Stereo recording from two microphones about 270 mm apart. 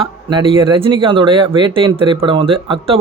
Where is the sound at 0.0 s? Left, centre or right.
Centre.